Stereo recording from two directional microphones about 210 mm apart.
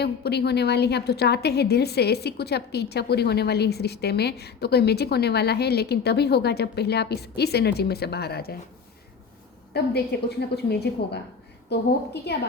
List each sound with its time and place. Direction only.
0.0 s a woman's voice: 50° left (ahead or behind)
9.7 s a woman's voice: 50° left (ahead or behind)